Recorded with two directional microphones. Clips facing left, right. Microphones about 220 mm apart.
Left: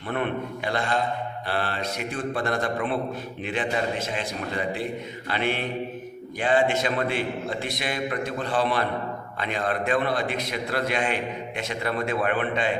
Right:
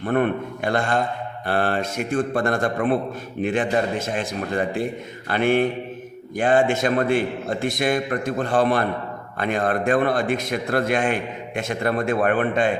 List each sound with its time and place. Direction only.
0.0 s a man's voice: 50° right (ahead or behind)